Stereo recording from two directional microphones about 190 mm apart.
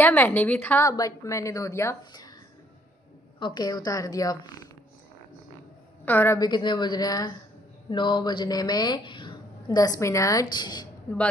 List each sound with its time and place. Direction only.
0.0 s a woman's voice: 10° left (ahead or behind)
3.3 s a woman's voice: 25° left (ahead or behind)
6.0 s a woman's voice: 10° left (ahead or behind)